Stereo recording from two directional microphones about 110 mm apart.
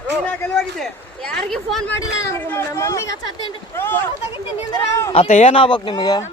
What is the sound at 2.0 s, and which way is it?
Speech, 30° left (ahead or behind).